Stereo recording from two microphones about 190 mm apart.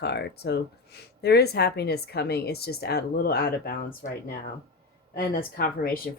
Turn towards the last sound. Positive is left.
turn(degrees=50)  # may be behind; listen again after turning